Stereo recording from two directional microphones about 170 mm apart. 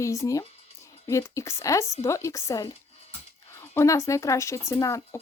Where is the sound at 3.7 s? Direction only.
15° left (ahead or behind).